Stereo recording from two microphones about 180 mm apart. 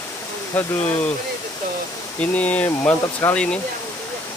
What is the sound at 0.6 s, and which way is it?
Speech, 10° left (ahead or behind).